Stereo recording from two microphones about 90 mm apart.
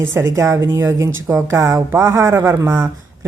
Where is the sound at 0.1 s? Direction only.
30° right (ahead or behind).